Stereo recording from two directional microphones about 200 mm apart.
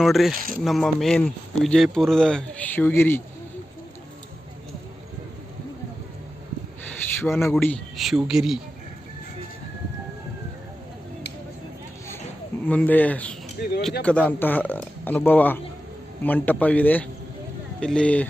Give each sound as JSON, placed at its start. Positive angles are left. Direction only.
{"t": 0.0, "sound": "speech", "side_deg": 0}
{"t": 0.3, "sound": "speech", "side_deg": -45}
{"t": 0.6, "sound": "speech", "side_deg": 0}
{"t": 7.3, "sound": "speech", "side_deg": 10}
{"t": 12.6, "sound": "a man's voice", "side_deg": 10}
{"t": 13.6, "sound": "speech", "side_deg": 55}
{"t": 14.0, "sound": "a man's voice", "side_deg": 5}